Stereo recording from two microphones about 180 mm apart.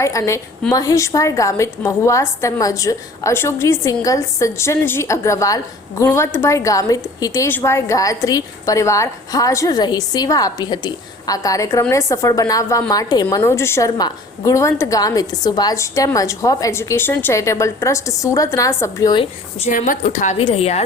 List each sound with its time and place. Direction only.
0.0 s a woman's voice: 15° left (ahead or behind); by 19.7 s 30° left (ahead or behind)
19.7 s a woman's voice: 45° left (ahead or behind)